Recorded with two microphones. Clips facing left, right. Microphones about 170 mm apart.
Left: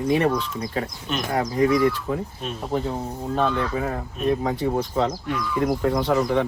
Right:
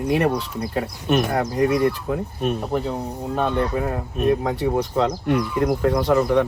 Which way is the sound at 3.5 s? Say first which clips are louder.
Right 3 dB; 35° right (ahead or behind).